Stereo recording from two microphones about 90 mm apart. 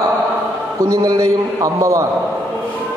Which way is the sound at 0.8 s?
40° right (ahead or behind).